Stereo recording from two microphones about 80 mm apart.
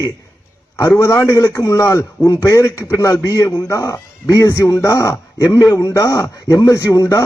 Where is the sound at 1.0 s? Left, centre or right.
Left.